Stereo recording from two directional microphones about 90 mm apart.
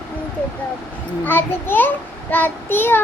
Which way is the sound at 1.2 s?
25° left (ahead or behind).